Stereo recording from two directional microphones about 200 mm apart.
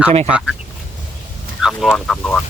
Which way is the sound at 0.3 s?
5° right (ahead or behind).